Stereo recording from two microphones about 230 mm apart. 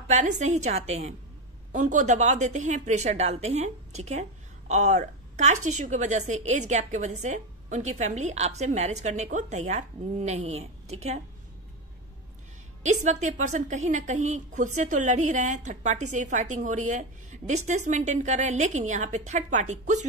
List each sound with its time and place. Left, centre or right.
0.1 s speech: right
12.8 s a woman's voice: right